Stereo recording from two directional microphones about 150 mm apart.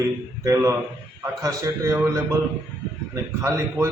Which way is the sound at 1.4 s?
20° right (ahead or behind).